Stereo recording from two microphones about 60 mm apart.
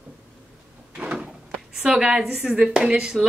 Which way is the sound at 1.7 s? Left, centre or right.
Centre.